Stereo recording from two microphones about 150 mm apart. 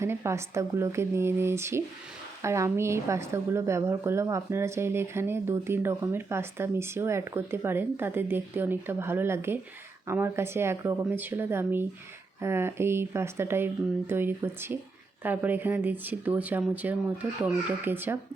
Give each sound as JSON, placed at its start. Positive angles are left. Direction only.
{"t": 0.0, "sound": "a woman's voice", "side_deg": -20}